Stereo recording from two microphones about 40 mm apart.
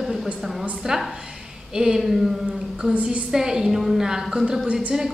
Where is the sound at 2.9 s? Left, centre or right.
Right.